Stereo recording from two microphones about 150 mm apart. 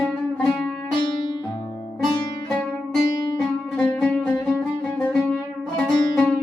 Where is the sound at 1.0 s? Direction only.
30° left (ahead or behind).